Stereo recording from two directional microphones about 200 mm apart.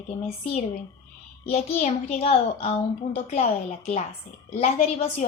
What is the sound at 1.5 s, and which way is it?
A child's voice, 35° left (ahead or behind).